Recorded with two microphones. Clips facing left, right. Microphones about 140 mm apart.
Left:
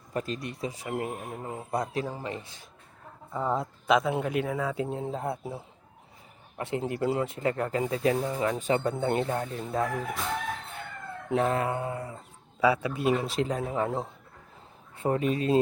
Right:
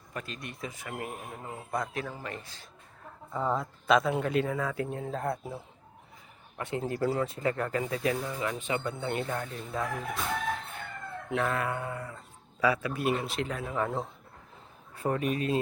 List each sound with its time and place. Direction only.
0.1 s speech: 35° left (ahead or behind)
3.3 s speech: 5° left (ahead or behind)
6.6 s speech: 25° left (ahead or behind); by 9.2 s 40° left (ahead or behind)
9.2 s speech: 30° left (ahead or behind)
11.3 s speech: 30° left (ahead or behind)
13.2 s speech: 35° left (ahead or behind)